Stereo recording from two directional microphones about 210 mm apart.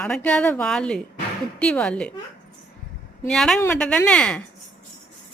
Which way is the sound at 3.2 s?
Centre (ahead or behind).